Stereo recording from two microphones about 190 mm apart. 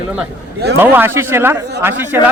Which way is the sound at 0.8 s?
10° right (ahead or behind).